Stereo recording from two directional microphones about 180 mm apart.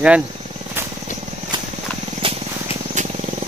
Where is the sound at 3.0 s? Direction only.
40° right (ahead or behind).